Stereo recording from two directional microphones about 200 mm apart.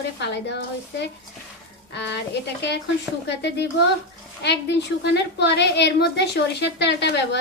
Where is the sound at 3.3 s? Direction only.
60° left (ahead or behind).